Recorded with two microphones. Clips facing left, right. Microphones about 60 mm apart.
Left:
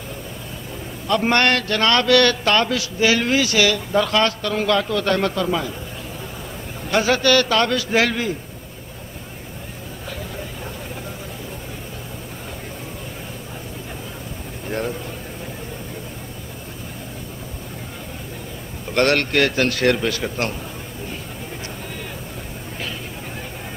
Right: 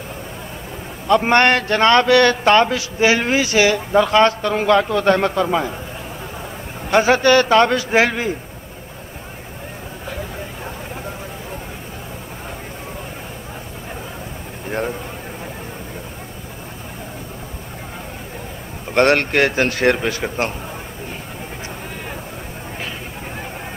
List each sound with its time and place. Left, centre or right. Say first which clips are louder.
1.0 s a man's voice: right 4 dB; right
6.9 s a man's voice: right 4 dB; right
18.9 s a man's voice: right 3 dB; right